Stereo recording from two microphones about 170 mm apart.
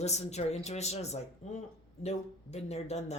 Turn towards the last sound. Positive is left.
turn(degrees=40)  # may be behind; listen again after turning